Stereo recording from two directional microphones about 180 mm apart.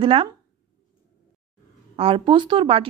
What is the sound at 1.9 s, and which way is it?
Speech, 30° right (ahead or behind).